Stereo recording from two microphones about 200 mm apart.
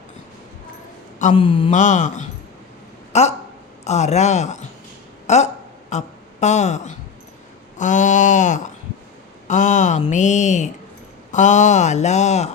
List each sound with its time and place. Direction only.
1.2 s mantra: 25° left (ahead or behind)
1.7 s speech: 40° left (ahead or behind)